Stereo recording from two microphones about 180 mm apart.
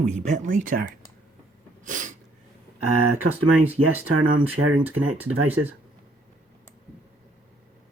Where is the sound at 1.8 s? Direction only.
45° right (ahead or behind).